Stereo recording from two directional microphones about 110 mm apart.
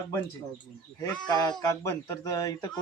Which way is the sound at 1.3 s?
35° left (ahead or behind).